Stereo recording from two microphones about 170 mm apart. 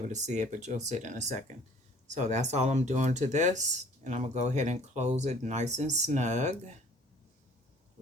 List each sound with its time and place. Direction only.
0.1 s speech: 45° right (ahead or behind)